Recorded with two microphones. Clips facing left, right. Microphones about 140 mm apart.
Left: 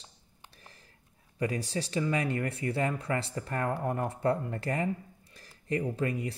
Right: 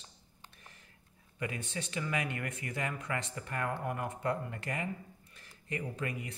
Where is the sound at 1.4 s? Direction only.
35° left (ahead or behind).